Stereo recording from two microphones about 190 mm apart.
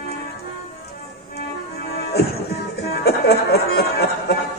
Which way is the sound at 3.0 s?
60° left (ahead or behind).